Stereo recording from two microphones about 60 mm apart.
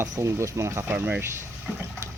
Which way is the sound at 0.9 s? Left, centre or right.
Right.